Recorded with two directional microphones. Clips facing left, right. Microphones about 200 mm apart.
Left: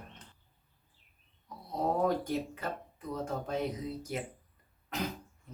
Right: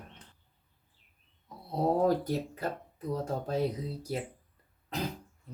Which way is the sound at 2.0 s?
40° right (ahead or behind).